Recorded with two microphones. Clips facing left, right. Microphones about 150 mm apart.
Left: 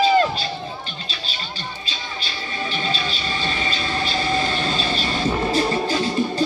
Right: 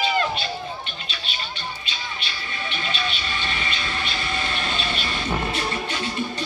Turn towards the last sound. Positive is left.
turn(degrees=35)  # may be behind; listen again after turning